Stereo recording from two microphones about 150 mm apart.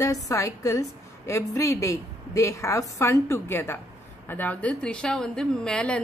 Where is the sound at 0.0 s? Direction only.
20° left (ahead or behind).